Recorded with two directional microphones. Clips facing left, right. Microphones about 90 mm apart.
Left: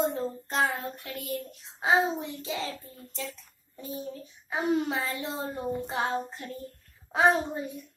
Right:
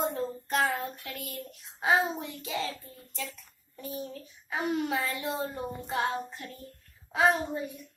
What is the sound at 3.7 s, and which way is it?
Child singing, 20° left (ahead or behind).